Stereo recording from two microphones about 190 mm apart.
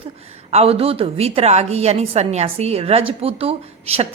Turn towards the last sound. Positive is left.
turn(degrees=-30)  # may be behind; listen again after turning